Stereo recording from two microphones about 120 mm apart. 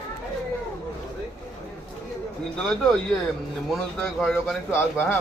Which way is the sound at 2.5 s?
5° left (ahead or behind).